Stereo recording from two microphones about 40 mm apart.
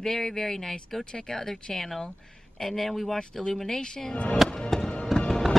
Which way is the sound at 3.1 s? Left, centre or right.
Centre.